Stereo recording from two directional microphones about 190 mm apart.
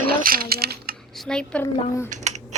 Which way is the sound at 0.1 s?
50° right (ahead or behind).